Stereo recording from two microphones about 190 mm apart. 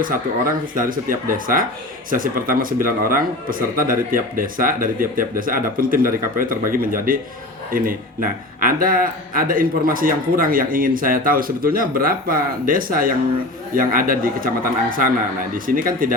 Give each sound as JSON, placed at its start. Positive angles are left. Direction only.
{"t": 0.7, "sound": "speech", "side_deg": -45}